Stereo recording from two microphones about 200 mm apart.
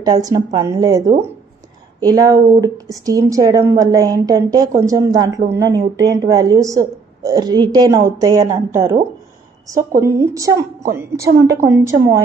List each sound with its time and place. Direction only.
0.0 s a woman's voice: 20° right (ahead or behind)
9.9 s a woman's voice: 15° right (ahead or behind)